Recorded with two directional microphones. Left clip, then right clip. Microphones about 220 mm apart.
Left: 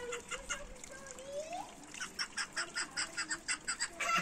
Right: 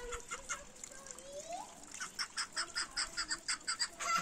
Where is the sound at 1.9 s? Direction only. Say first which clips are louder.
Even; 45° right (ahead or behind).